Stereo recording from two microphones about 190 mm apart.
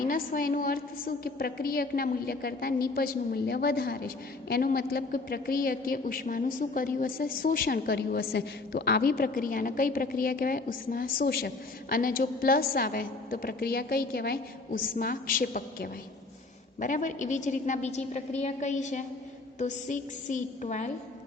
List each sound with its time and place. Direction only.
0.0 s a woman's voice: 45° left (ahead or behind)